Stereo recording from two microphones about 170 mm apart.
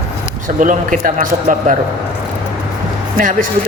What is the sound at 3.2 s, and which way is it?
Speech, 50° right (ahead or behind).